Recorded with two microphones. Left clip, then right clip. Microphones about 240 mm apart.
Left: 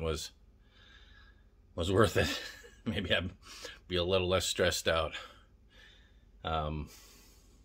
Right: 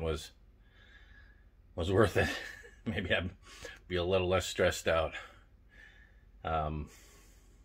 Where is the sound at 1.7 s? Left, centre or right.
Centre.